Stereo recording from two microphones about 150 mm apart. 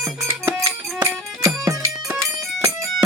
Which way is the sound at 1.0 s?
20° right (ahead or behind).